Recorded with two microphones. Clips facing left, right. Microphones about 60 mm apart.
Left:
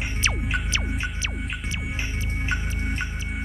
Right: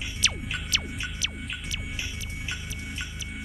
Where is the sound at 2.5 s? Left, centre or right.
Left.